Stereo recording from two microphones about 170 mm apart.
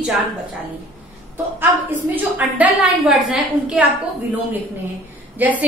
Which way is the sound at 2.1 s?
10° right (ahead or behind).